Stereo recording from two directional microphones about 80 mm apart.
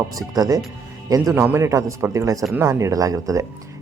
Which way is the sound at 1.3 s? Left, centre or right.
Right.